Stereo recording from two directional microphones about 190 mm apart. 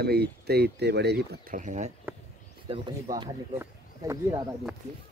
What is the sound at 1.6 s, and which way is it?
Speech, 40° right (ahead or behind).